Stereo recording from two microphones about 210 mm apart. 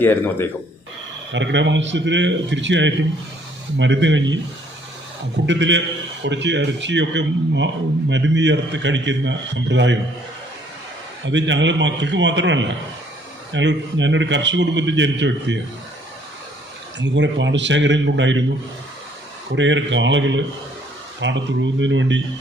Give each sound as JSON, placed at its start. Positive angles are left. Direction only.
{"t": 0.0, "sound": "speech", "side_deg": 10}
{"t": 1.3, "sound": "a man's voice", "side_deg": -60}
{"t": 5.5, "sound": "a man's voice", "side_deg": -60}
{"t": 11.3, "sound": "a man's voice", "side_deg": -60}
{"t": 17.0, "sound": "a man's voice", "side_deg": -60}
{"t": 19.5, "sound": "a man's voice", "side_deg": -60}